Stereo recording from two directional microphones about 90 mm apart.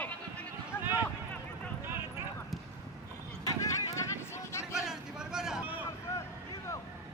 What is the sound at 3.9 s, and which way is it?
Vehicle, 30° left (ahead or behind).